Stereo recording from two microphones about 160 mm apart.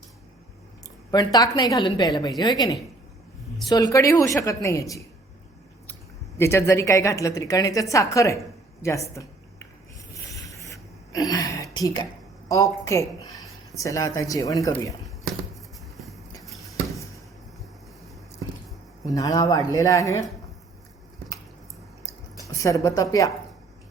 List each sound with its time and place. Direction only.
1.1 s a woman's voice: 25° left (ahead or behind)
8.8 s a sound: 20° left (ahead or behind)
10.7 s gasp: 20° left (ahead or behind)
12.5 s a woman's voice: 20° left (ahead or behind)
16.4 s a sound: centre (ahead or behind)
19.0 s a woman's voice: 20° left (ahead or behind)
22.5 s a woman's voice: 20° left (ahead or behind)